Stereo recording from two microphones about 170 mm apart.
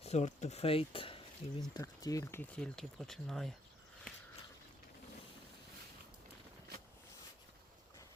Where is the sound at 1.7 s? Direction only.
20° left (ahead or behind); by 3.5 s centre (ahead or behind).